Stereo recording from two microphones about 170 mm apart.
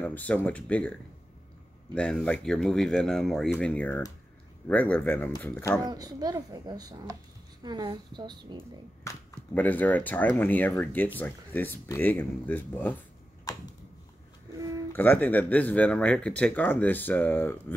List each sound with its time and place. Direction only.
0.0 s speech: 10° left (ahead or behind)
2.0 s speech: 5° left (ahead or behind)
5.9 s a child's voice: 20° right (ahead or behind)
9.0 s speech: 10° left (ahead or behind)
14.9 s speech: 10° left (ahead or behind)